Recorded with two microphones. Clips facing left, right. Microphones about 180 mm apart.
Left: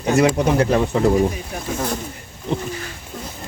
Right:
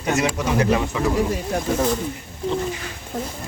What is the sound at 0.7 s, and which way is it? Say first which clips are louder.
Speech: left 5 dB; 45° left (ahead or behind).